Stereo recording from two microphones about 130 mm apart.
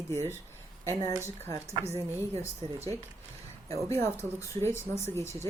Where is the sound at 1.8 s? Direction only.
55° right (ahead or behind).